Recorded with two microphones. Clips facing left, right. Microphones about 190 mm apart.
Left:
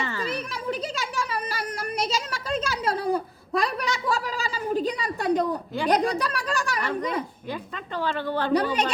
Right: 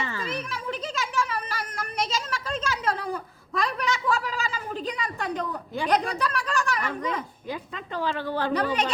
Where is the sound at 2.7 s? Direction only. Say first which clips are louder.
Left 4 dB; 35° left (ahead or behind).